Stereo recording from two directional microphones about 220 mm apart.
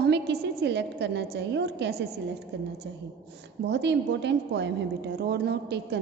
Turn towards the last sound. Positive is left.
turn(degrees=-50)  # may be behind; listen again after turning